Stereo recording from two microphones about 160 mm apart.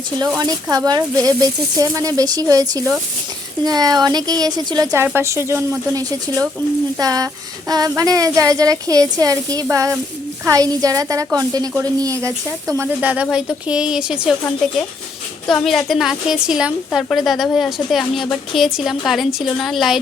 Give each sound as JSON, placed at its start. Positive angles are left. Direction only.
{"t": 0.3, "sound": "a woman's voice", "side_deg": -25}
{"t": 15.4, "sound": "a woman's voice", "side_deg": 5}